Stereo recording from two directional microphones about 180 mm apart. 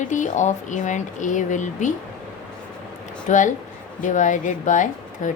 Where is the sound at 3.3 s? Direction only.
40° left (ahead or behind).